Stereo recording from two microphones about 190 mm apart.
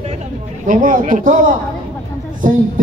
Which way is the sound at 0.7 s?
45° right (ahead or behind).